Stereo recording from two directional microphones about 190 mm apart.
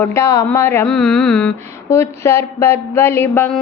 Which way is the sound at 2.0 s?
15° left (ahead or behind).